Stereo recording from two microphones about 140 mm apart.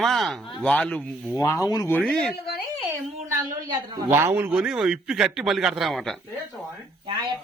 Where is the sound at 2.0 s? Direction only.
5° left (ahead or behind).